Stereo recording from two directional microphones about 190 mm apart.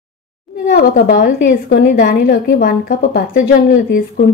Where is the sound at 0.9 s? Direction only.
50° left (ahead or behind); by 1.9 s 65° left (ahead or behind).